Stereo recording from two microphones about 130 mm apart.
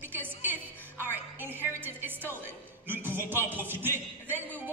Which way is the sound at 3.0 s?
15° right (ahead or behind).